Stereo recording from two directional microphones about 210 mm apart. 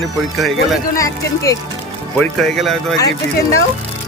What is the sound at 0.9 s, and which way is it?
Speech, 15° left (ahead or behind).